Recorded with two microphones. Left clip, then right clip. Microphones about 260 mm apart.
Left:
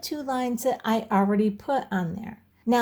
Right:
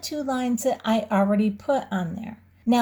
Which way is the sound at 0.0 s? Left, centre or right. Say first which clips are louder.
Right 1 dB; left.